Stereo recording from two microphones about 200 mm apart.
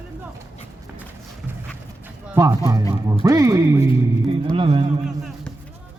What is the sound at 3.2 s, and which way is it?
Speech, 15° right (ahead or behind).